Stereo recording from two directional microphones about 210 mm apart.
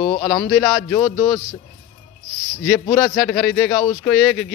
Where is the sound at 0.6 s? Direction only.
Centre (ahead or behind).